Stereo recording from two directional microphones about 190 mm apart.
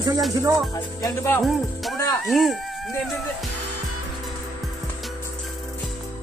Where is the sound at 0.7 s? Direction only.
20° left (ahead or behind).